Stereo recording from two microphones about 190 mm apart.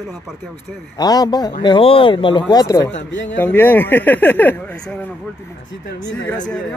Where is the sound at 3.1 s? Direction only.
75° left (ahead or behind).